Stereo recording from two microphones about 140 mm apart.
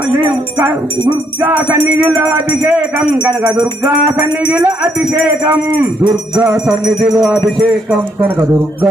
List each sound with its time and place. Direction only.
0.1 s music: 10° right (ahead or behind)
8.2 s music: 15° right (ahead or behind)